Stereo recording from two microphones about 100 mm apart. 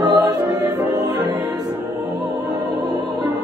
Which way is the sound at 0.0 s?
40° right (ahead or behind).